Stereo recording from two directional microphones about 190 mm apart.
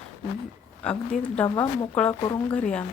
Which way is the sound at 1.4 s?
20° left (ahead or behind).